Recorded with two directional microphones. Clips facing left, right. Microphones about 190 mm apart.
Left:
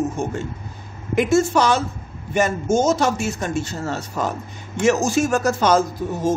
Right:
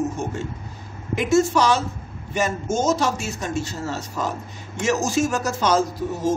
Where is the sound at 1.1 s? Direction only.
55° left (ahead or behind).